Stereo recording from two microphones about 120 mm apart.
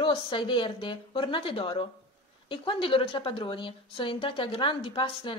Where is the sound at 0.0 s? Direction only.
45° left (ahead or behind).